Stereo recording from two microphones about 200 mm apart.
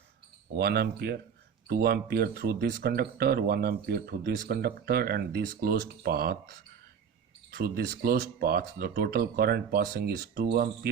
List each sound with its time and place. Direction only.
0.5 s speech: 50° right (ahead or behind)